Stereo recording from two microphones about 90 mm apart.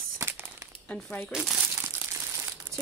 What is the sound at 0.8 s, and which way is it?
Speech, 15° left (ahead or behind).